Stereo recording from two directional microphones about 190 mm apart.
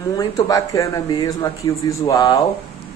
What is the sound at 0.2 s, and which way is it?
Speech, 20° left (ahead or behind).